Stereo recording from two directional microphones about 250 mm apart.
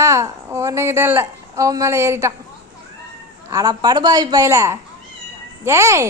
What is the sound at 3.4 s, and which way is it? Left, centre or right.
Speech, centre.